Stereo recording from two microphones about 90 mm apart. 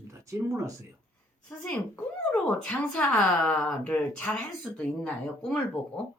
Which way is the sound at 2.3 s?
15° left (ahead or behind).